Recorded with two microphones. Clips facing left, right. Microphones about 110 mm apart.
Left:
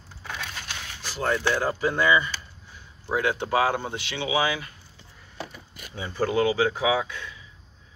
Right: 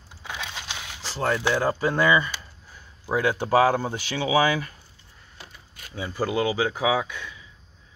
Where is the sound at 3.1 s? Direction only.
40° right (ahead or behind).